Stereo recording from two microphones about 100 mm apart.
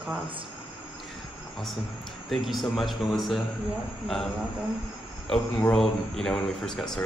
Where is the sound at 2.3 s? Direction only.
Centre (ahead or behind).